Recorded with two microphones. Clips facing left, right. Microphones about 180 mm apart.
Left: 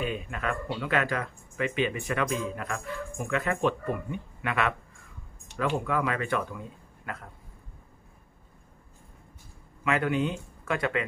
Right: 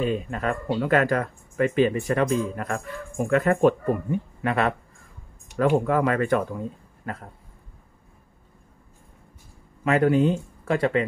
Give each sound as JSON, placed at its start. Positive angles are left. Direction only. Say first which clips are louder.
{"t": 0.0, "sound": "speech", "louder": "right 6 dB", "side_deg": -35}
{"t": 5.8, "sound": "speech", "louder": "right 7 dB", "side_deg": -45}
{"t": 9.8, "sound": "speech", "louder": "right 7 dB", "side_deg": -40}